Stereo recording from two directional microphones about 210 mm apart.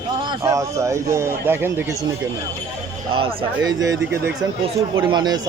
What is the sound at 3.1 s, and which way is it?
Speech, 20° right (ahead or behind).